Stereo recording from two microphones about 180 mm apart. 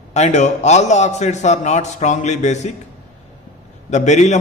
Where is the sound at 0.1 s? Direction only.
40° left (ahead or behind).